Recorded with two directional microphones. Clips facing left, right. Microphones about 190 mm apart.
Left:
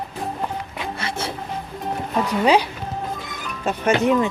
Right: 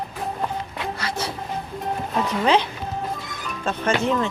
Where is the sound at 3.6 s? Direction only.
15° left (ahead or behind).